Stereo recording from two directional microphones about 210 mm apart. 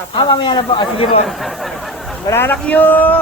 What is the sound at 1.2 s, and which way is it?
Speech, centre (ahead or behind).